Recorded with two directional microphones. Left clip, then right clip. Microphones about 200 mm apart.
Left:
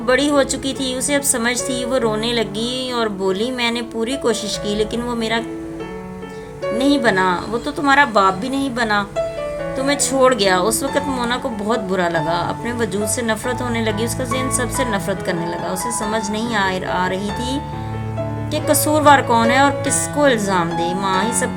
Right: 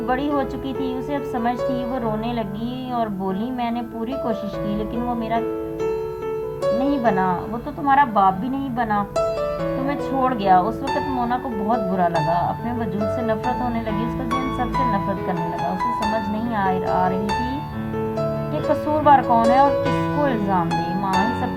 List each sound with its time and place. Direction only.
0.1 s a woman's voice: 20° left (ahead or behind)
6.7 s a woman's voice: 20° left (ahead or behind)
16.1 s a woman's voice: 20° left (ahead or behind)
18.9 s a woman's voice: 20° left (ahead or behind)